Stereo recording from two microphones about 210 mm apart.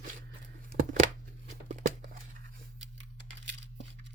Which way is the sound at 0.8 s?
40° right (ahead or behind).